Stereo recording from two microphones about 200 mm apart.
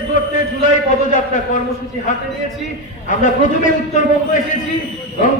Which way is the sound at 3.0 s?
40° left (ahead or behind).